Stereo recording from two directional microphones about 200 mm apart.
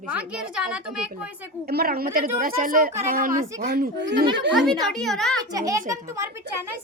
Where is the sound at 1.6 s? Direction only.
50° right (ahead or behind).